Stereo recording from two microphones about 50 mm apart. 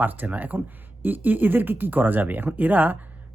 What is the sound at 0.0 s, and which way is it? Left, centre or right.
A woman's voice, right.